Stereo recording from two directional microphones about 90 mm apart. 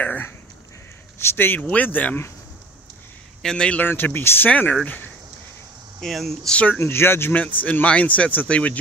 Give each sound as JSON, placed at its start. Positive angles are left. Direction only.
{"t": 0.0, "sound": "speech", "side_deg": 20}
{"t": 3.4, "sound": "speech", "side_deg": 10}
{"t": 3.8, "sound": "speech", "side_deg": 25}
{"t": 5.9, "sound": "speech", "side_deg": 5}
{"t": 6.8, "sound": "speech", "side_deg": 25}